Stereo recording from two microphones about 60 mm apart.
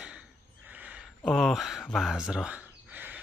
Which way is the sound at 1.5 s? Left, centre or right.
Centre.